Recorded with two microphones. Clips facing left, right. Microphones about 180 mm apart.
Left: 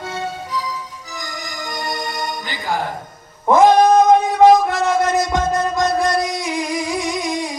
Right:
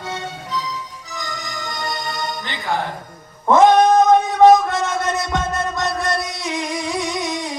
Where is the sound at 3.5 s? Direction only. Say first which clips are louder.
Even; 20° right (ahead or behind).